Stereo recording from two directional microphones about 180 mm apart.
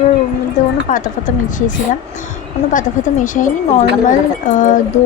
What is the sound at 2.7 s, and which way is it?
Speech, 45° left (ahead or behind).